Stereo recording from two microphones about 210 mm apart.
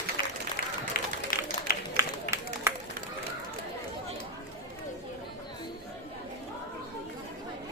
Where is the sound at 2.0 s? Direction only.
10° right (ahead or behind).